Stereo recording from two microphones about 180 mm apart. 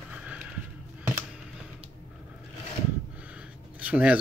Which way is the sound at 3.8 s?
5° right (ahead or behind).